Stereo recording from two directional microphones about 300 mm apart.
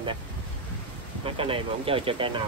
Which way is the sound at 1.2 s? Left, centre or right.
Centre.